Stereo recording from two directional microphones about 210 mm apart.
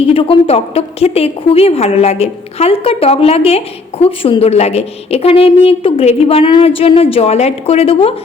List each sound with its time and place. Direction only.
0.0 s a woman's voice: 25° left (ahead or behind)